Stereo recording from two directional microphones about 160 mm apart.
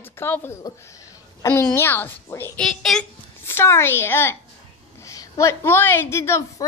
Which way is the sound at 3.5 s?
15° left (ahead or behind).